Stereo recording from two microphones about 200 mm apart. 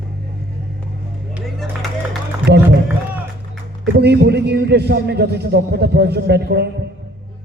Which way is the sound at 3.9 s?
55° right (ahead or behind).